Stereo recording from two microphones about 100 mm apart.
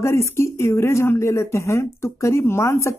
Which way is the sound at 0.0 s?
25° left (ahead or behind).